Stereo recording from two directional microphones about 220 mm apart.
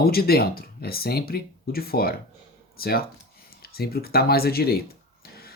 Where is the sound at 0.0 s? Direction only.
45° left (ahead or behind).